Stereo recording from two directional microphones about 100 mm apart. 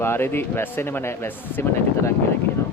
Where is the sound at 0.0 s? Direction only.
25° left (ahead or behind).